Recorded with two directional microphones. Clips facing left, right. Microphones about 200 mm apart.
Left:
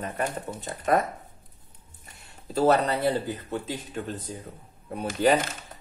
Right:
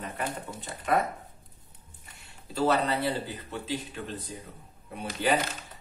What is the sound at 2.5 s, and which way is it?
Speech, 45° left (ahead or behind).